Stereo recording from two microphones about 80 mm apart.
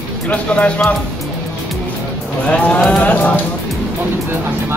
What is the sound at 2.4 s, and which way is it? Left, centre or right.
Speech, centre.